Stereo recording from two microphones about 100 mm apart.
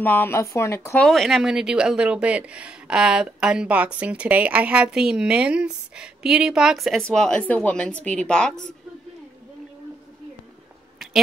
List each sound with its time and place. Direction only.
0.0 s speech: 20° left (ahead or behind)
0.9 s speech: 5° left (ahead or behind)
7.0 s a woman's voice: 10° left (ahead or behind)